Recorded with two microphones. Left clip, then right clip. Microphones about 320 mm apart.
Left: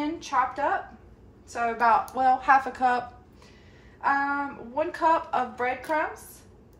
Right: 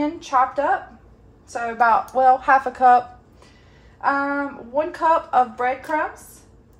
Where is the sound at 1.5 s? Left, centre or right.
Right.